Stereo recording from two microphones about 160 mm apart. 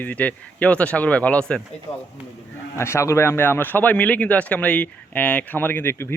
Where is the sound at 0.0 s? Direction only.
10° left (ahead or behind).